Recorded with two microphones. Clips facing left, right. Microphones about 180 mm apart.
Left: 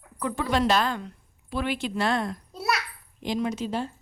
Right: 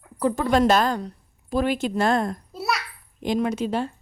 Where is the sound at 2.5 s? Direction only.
Centre (ahead or behind).